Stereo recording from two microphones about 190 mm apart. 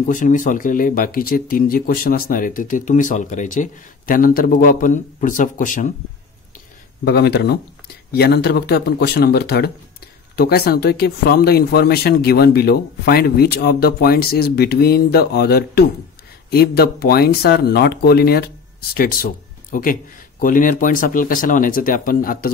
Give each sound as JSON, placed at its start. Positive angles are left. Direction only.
{"t": 0.0, "sound": "speech", "side_deg": 45}
{"t": 7.1, "sound": "speech", "side_deg": 55}